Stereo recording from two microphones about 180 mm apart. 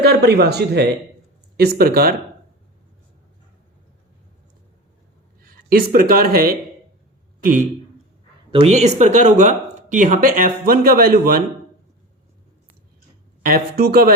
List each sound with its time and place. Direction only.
0.0 s speech: 65° right (ahead or behind)
5.4 s speech: 55° right (ahead or behind)
8.4 s speech: 35° right (ahead or behind); by 11.4 s 55° right (ahead or behind)
13.4 s speech: 55° right (ahead or behind)